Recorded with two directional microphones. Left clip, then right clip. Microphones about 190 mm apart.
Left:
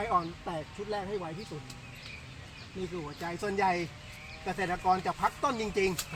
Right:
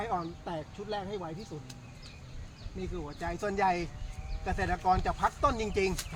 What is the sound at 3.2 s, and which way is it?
A man's voice, 5° right (ahead or behind).